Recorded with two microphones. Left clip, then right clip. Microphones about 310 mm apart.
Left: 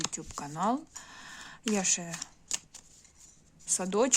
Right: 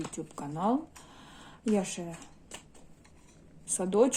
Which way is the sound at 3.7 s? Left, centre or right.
Left.